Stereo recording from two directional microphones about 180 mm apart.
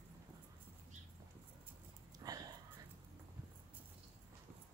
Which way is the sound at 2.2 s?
20° right (ahead or behind).